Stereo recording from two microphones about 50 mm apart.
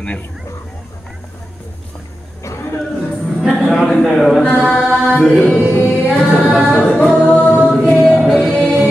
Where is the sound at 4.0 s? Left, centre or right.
Centre.